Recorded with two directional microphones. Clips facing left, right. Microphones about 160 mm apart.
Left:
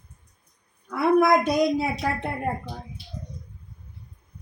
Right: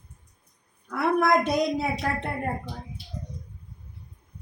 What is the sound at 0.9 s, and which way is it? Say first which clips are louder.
Speech: left 4 dB; centre (ahead or behind).